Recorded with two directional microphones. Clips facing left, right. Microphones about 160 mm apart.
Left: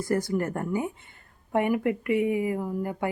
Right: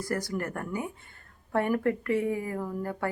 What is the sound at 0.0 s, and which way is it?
Speech, 25° left (ahead or behind).